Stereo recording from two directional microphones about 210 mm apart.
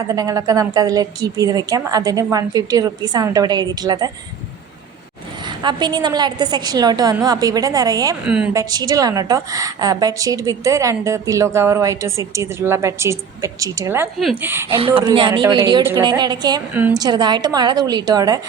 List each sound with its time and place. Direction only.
0.1 s a woman's voice: 15° right (ahead or behind)
5.5 s a woman's voice: 20° right (ahead or behind)
8.2 s speech: 5° right (ahead or behind)
8.5 s a woman's voice: 20° right (ahead or behind)
14.2 s speech: centre (ahead or behind)
14.5 s a woman's voice: 10° right (ahead or behind)
14.8 s a woman's voice: 25° right (ahead or behind)